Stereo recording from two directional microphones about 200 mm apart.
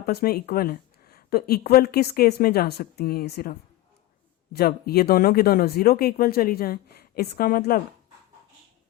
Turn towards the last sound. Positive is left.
turn(degrees=45)  # may be behind; listen again after turning